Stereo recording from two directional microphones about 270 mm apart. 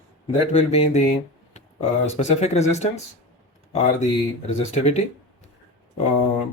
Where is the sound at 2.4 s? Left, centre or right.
Left.